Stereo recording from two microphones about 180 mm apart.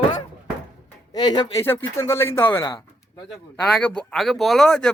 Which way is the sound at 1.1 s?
25° left (ahead or behind).